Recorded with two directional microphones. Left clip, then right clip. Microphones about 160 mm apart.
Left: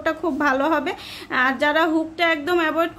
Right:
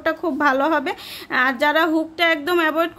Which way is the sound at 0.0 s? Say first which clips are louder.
Right 2 dB; 30° right (ahead or behind).